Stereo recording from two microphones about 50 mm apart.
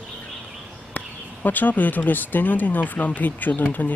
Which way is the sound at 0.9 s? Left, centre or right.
Left.